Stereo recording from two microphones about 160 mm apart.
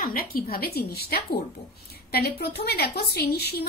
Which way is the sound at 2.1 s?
90° left.